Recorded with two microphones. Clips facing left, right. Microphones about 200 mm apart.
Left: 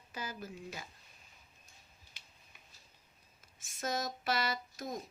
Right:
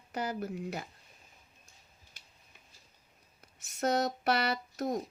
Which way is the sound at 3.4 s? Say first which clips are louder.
Right 8 dB; 65° right (ahead or behind).